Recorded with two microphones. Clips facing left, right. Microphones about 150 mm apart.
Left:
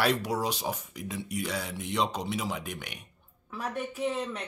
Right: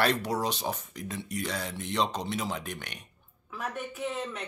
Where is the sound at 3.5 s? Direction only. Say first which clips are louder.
Left 2 dB; 35° left (ahead or behind).